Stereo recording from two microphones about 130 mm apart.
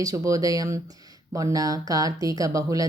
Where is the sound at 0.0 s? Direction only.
25° right (ahead or behind).